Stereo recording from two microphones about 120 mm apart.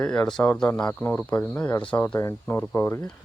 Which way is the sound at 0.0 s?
5° left (ahead or behind).